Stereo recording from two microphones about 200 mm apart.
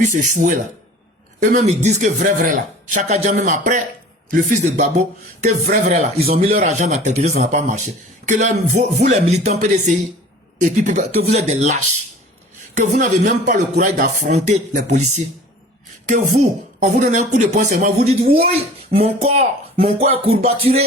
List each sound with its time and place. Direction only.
0.0 s speech: 40° right (ahead or behind)
5.6 s speech: 50° right (ahead or behind)
6.5 s speech: 40° right (ahead or behind)
18.2 s speech: 50° right (ahead or behind)
18.9 s speech: 30° right (ahead or behind)